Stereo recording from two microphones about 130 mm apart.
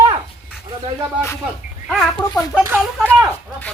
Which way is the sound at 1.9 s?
5° left (ahead or behind).